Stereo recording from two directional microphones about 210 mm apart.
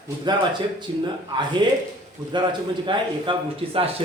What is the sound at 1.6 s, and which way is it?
Speech, 20° right (ahead or behind).